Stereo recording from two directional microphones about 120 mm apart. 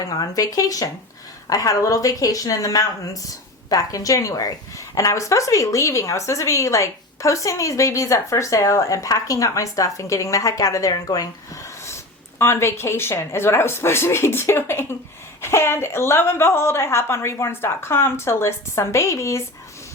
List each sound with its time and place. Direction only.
0.0 s a woman's voice: 35° left (ahead or behind)
12.4 s a woman's voice: 20° left (ahead or behind)